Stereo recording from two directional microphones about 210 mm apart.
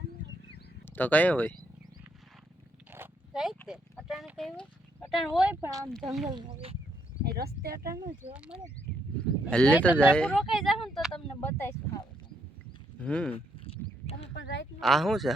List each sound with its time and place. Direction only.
0.9 s speech: 10° left (ahead or behind)
2.9 s a sound: 5° right (ahead or behind)
3.7 s speech: centre (ahead or behind)
6.2 s speech: 25° right (ahead or behind)
7.3 s speech: 50° right (ahead or behind)
8.3 s speech: 5° right (ahead or behind)
9.7 s speech: 10° right (ahead or behind)
10.1 s speech: 5° left (ahead or behind)
13.0 s speech: 5° left (ahead or behind)
13.3 s a sound: 30° left (ahead or behind)
14.4 s speech: 55° left (ahead or behind)
14.8 s speech: centre (ahead or behind)